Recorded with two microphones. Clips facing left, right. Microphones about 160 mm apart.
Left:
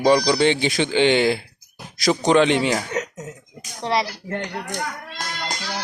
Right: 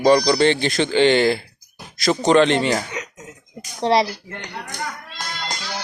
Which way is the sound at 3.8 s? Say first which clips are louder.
Right 5 dB; 25° right (ahead or behind).